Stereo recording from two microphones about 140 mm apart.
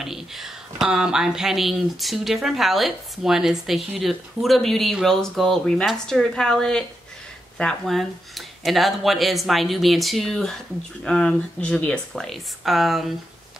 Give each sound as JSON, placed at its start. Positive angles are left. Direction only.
{"t": 0.0, "sound": "speech", "side_deg": 0}